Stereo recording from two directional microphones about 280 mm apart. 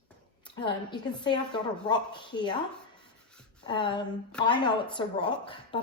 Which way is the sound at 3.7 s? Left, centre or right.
Centre.